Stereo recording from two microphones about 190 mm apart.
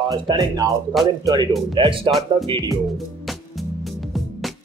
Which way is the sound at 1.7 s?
25° right (ahead or behind).